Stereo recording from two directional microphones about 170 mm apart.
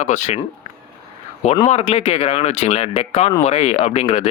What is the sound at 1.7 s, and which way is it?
Speech, 40° left (ahead or behind).